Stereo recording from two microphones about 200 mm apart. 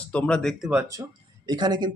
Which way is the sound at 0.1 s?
5° left (ahead or behind).